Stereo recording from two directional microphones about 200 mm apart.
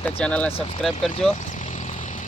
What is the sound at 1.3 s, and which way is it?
Vehicle, 35° left (ahead or behind).